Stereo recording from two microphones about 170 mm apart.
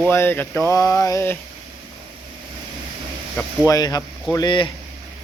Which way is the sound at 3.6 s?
20° left (ahead or behind).